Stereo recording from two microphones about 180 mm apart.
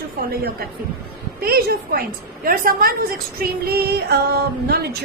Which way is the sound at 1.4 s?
55° right (ahead or behind).